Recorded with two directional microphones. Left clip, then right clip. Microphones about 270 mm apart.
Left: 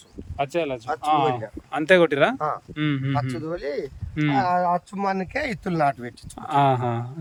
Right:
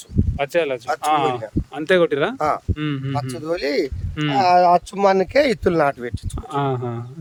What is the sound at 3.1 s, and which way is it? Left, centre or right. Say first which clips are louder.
A man's voice: right 3 dB; right.